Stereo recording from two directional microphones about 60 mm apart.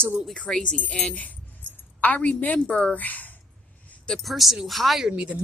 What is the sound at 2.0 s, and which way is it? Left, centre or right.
A woman's voice, left.